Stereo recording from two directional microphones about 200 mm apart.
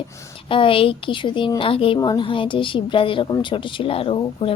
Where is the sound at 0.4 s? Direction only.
25° left (ahead or behind).